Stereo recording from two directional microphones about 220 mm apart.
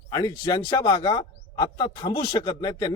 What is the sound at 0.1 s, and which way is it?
Speech, 20° left (ahead or behind).